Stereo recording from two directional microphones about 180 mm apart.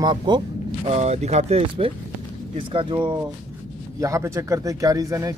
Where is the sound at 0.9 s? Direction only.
35° right (ahead or behind).